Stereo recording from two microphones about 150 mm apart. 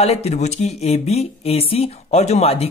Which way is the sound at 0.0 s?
45° left (ahead or behind).